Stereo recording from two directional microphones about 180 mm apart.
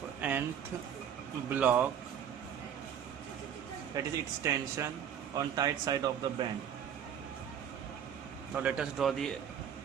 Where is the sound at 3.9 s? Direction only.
20° right (ahead or behind).